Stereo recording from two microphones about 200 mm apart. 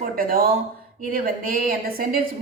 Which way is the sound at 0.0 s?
45° right (ahead or behind).